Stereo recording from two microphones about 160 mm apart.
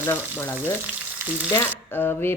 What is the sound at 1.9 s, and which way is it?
Speech, 15° left (ahead or behind).